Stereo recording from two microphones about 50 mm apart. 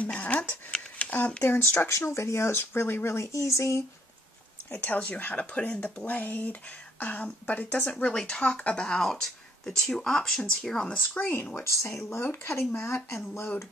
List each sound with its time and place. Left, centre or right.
0.0 s speech: left
0.9 s a sound: left
1.4 s speech: left
1.9 s speech: left
4.7 s speech: left
8.1 s speech: centre
11.0 s speech: left
11.5 s speech: left